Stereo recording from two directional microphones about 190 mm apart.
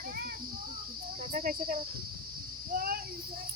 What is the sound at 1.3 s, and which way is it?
Cricket, 45° right (ahead or behind).